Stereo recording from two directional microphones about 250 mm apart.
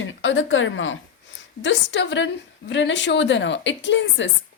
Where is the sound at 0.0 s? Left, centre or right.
Left.